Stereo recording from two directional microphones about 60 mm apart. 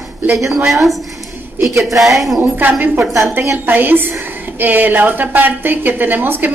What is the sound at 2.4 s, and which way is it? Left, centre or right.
A woman's voice, right.